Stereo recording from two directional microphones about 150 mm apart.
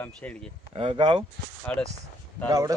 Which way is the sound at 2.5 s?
25° right (ahead or behind).